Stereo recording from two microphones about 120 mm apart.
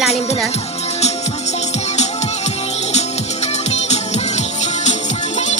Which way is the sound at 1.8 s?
70° left (ahead or behind).